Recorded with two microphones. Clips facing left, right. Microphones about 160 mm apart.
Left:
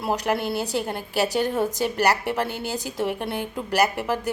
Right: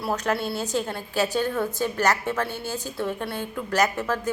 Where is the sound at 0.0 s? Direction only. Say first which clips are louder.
Left 2 dB; 15° left (ahead or behind).